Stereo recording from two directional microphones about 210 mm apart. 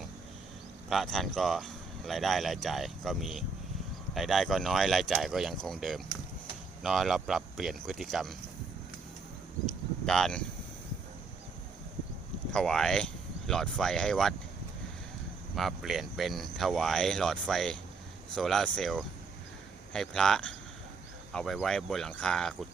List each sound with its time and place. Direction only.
0.9 s speech: centre (ahead or behind)
10.1 s speech: 5° left (ahead or behind)
12.5 s speech: 5° left (ahead or behind)
15.5 s speech: centre (ahead or behind)